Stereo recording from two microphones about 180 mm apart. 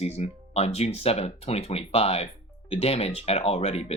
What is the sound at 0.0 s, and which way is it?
Speech, 35° left (ahead or behind).